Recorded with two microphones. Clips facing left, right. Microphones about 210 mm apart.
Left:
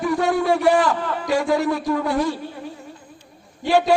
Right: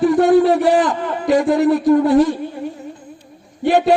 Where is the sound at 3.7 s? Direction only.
20° right (ahead or behind).